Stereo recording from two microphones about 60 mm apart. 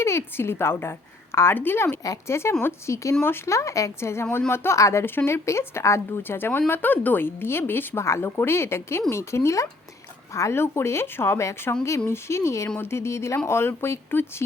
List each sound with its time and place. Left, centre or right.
0.0 s a woman's voice: left
3.2 s a woman's voice: left
4.8 s speech: left
5.0 s a woman's voice: left
6.2 s a woman's voice: left
12.6 s a woman's voice: left